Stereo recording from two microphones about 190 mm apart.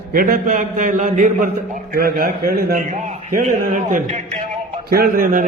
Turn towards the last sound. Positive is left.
turn(degrees=-50)  # may be behind; listen again after turning